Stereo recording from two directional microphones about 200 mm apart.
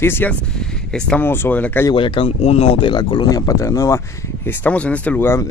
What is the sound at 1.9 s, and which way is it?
Speech, 25° left (ahead or behind).